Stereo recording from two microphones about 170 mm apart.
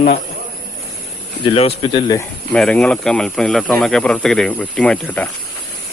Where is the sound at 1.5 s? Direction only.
35° left (ahead or behind).